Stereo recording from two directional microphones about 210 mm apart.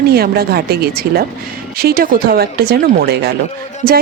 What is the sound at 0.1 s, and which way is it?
Speech, 45° right (ahead or behind).